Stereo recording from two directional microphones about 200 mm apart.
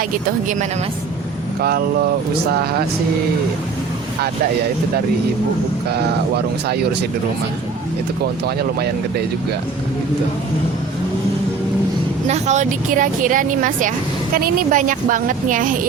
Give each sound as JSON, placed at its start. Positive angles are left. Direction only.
{"t": 0.1, "sound": "speech", "side_deg": -40}
{"t": 5.9, "sound": "speech", "side_deg": -55}
{"t": 8.4, "sound": "speech", "side_deg": -55}
{"t": 12.3, "sound": "speech", "side_deg": -35}